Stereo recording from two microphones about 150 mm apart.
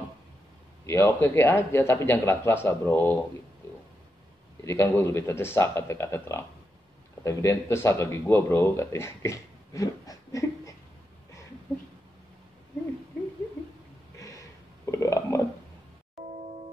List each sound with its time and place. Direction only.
0.8 s speech: 15° left (ahead or behind)
4.6 s speech: 20° left (ahead or behind)
14.9 s burping: 20° left (ahead or behind)